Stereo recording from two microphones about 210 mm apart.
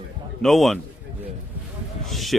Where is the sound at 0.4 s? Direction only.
Centre (ahead or behind).